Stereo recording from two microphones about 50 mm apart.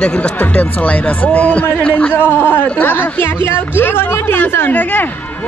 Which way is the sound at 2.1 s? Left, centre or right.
Left.